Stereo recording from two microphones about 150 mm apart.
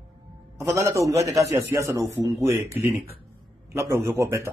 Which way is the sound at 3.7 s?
20° right (ahead or behind).